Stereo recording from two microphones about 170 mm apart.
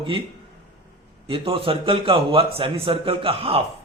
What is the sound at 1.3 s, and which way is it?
Speech, 30° right (ahead or behind).